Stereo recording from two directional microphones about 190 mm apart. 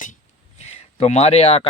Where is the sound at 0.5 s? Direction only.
35° left (ahead or behind).